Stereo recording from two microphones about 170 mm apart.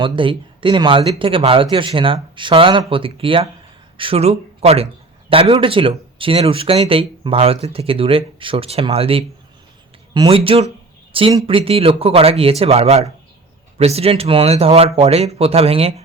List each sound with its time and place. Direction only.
0.0 s speech: 30° right (ahead or behind)